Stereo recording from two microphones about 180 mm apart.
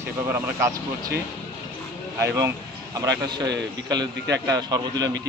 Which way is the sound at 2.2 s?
15° right (ahead or behind).